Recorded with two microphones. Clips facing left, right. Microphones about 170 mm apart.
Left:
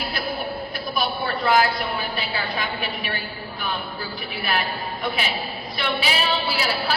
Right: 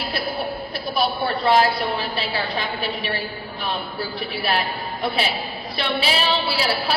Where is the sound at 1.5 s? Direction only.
30° right (ahead or behind).